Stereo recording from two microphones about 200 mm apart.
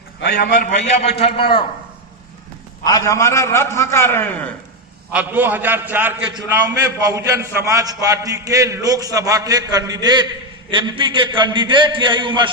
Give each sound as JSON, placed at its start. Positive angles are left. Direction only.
{"t": 0.2, "sound": "a man's voice", "side_deg": 50}
{"t": 2.8, "sound": "a man's voice", "side_deg": 15}
{"t": 5.1, "sound": "a man's voice", "side_deg": -10}